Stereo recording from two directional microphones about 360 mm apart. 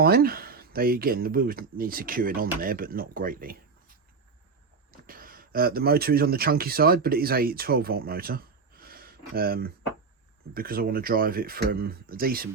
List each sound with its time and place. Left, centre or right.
0.0 s speech: right